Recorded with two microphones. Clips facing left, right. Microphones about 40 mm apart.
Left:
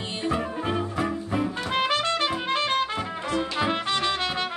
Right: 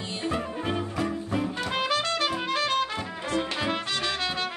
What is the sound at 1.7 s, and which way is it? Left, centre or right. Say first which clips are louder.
Music: left 3 dB; left.